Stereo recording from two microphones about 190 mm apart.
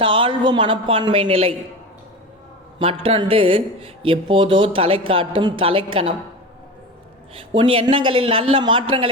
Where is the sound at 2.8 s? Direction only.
30° right (ahead or behind).